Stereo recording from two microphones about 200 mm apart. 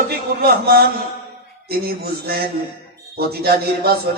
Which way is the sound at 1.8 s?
50° right (ahead or behind).